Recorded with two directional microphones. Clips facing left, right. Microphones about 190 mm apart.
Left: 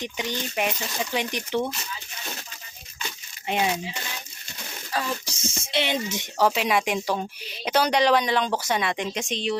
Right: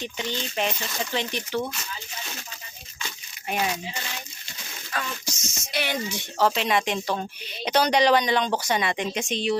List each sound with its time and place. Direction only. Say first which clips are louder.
0.0 s speech: left 1 dB; 15° left (ahead or behind)
3.4 s speech: left 2 dB; 20° left (ahead or behind)
4.9 s speech: left 3 dB; 30° left (ahead or behind)
6.5 s speech: left 1 dB; 5° left (ahead or behind)